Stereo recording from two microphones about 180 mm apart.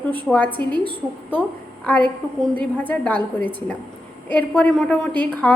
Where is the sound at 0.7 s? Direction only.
30° right (ahead or behind).